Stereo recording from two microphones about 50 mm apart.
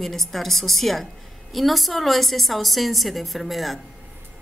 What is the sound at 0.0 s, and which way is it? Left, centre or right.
A woman's voice, centre.